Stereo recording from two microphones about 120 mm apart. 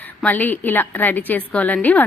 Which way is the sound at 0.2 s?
15° left (ahead or behind).